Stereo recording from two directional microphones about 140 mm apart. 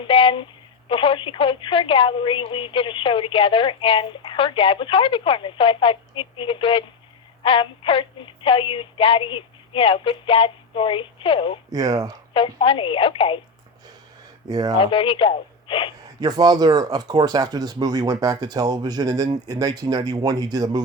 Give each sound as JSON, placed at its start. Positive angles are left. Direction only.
{"t": 0.0, "sound": "a woman's voice", "side_deg": 40}
{"t": 11.7, "sound": "speech", "side_deg": -25}
{"t": 12.3, "sound": "a woman's voice", "side_deg": 40}
{"t": 14.5, "sound": "speech", "side_deg": -30}
{"t": 14.8, "sound": "a woman's voice", "side_deg": 40}
{"t": 16.2, "sound": "speech", "side_deg": -30}